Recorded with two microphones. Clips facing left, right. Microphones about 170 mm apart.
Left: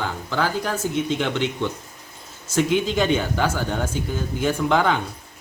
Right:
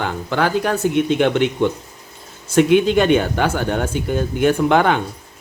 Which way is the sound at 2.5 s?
65° right (ahead or behind).